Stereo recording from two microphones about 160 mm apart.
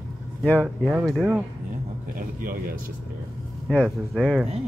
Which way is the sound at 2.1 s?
60° right (ahead or behind).